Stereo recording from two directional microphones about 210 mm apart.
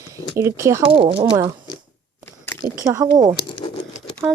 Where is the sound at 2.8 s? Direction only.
15° right (ahead or behind).